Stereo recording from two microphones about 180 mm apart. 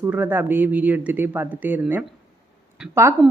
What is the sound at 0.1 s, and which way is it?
Speech, 10° right (ahead or behind).